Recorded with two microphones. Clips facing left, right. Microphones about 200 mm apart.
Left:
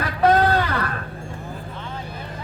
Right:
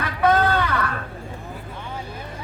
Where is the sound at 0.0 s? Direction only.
35° left (ahead or behind).